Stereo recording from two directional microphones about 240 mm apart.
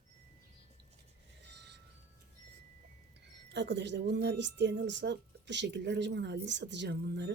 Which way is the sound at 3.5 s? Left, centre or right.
Right.